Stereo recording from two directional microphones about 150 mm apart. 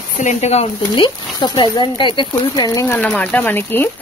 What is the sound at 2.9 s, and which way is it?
Speech, 10° left (ahead or behind).